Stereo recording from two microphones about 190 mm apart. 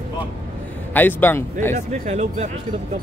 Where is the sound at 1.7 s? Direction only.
35° right (ahead or behind).